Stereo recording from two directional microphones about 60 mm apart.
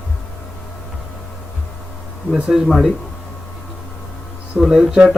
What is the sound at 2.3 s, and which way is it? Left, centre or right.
Speech, centre.